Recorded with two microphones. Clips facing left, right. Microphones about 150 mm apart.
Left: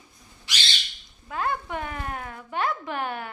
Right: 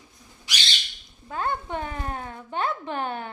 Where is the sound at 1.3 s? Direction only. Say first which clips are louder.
Even; 30° right (ahead or behind).